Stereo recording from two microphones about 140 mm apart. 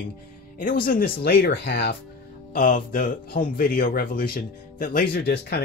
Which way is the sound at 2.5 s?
70° left (ahead or behind).